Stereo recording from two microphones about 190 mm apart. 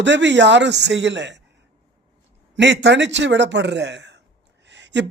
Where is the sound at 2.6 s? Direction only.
70° right (ahead or behind).